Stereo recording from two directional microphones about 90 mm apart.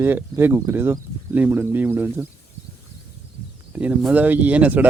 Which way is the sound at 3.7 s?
20° right (ahead or behind).